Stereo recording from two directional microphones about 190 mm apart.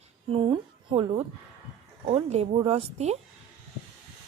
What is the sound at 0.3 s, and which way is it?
A woman's voice, 30° right (ahead or behind).